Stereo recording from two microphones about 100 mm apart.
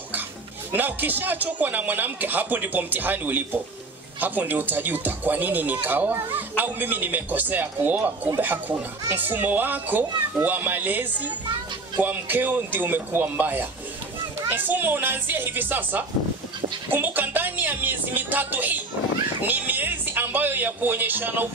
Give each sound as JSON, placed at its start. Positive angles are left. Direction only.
{"t": 0.7, "sound": "speech", "side_deg": -20}